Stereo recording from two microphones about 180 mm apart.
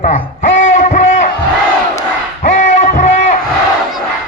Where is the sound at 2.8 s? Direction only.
40° left (ahead or behind).